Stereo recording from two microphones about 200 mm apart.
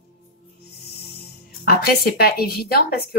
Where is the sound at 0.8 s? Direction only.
55° left (ahead or behind).